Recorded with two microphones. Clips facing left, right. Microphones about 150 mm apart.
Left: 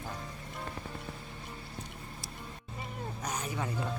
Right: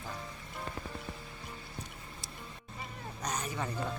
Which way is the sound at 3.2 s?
10° left (ahead or behind).